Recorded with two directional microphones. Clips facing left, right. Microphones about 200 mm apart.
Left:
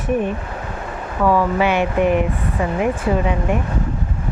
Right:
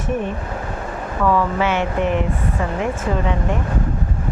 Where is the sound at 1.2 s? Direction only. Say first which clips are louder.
Left 2 dB; 15° left (ahead or behind).